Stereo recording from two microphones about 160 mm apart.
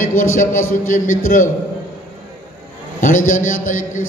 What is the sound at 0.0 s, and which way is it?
A man's voice, 60° left (ahead or behind).